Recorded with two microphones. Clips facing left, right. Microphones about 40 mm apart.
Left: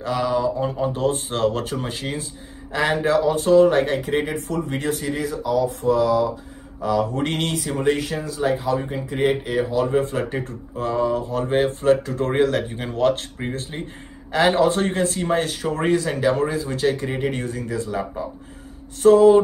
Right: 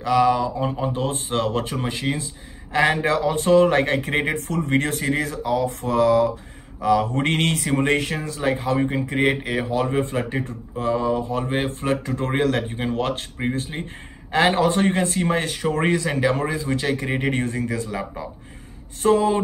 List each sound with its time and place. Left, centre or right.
0.4 s speech: centre
2.0 s speech: centre
2.7 s speech: right
9.9 s speech: right
12.1 s speech: right
12.6 s speech: centre
15.3 s speech: right
17.0 s speech: centre
17.3 s speech: right
19.0 s speech: right